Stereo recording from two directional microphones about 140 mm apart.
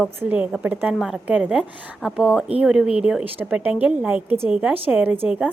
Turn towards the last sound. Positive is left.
turn(degrees=-10)  # may be behind; listen again after turning